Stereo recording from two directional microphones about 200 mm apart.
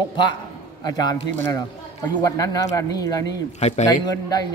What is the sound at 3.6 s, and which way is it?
Speech, 35° left (ahead or behind).